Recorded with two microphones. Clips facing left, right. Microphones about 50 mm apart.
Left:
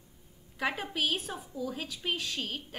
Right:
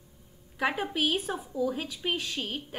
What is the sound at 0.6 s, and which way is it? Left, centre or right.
A woman's voice, centre.